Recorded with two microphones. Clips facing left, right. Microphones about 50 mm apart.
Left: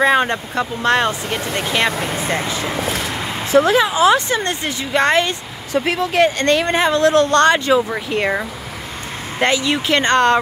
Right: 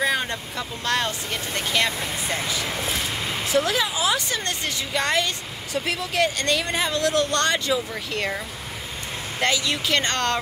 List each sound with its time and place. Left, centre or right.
0.0 s speech: left
2.0 s speech: left
9.4 s speech: left